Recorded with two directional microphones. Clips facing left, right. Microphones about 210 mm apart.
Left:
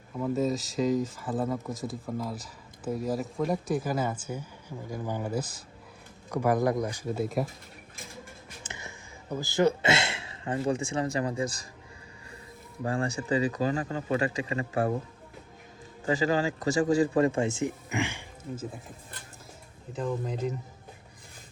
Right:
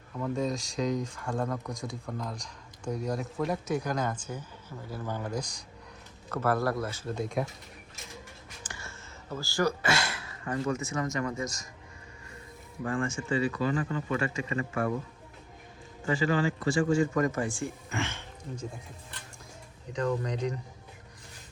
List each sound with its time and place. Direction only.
0.2 s speech: 5° left (ahead or behind)
8.6 s speech: 20° left (ahead or behind)
12.8 s speech: 35° left (ahead or behind)
16.0 s speech: 40° left (ahead or behind); by 18.8 s 5° left (ahead or behind)
19.9 s speech: 5° left (ahead or behind)